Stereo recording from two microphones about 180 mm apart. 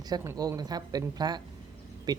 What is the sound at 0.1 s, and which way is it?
Speech, 20° right (ahead or behind).